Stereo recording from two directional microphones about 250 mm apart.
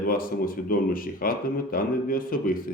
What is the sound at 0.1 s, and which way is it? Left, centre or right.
Speech, left.